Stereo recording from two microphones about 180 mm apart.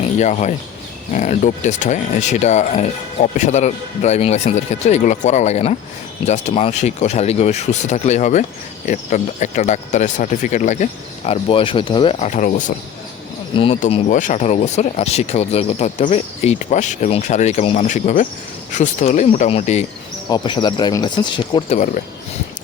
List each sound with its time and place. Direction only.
0.2 s speech: 40° left (ahead or behind)
11.3 s speech: 30° left (ahead or behind)
12.2 s speech: 40° left (ahead or behind)
13.7 s speech: 45° left (ahead or behind); by 21.8 s 25° left (ahead or behind)